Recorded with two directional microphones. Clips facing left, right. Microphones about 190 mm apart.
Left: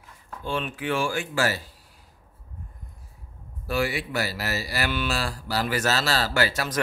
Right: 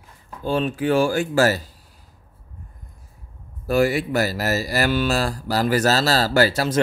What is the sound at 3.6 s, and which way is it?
Speech, 45° right (ahead or behind).